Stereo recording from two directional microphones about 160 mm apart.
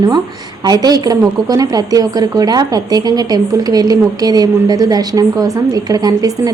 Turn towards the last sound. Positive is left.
turn(degrees=-20)  # may be behind; listen again after turning